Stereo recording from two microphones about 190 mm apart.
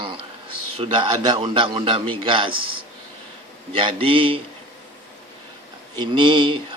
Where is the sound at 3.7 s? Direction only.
30° right (ahead or behind).